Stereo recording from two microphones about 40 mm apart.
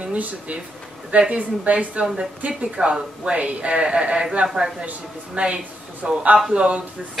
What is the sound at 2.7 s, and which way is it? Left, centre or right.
Speech, right.